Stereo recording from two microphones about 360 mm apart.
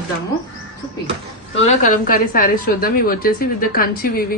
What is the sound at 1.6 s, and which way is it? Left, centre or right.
A woman's voice, centre.